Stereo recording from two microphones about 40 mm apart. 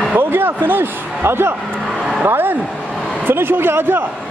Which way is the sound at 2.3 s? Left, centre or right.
Right.